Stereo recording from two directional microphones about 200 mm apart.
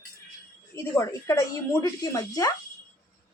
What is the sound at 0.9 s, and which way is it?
A woman's voice, 15° left (ahead or behind).